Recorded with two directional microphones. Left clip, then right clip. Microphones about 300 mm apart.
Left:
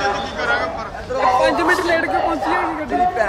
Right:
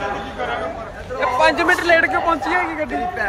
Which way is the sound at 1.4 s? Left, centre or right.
Centre.